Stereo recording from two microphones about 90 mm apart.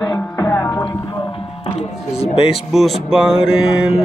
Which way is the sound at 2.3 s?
90° left.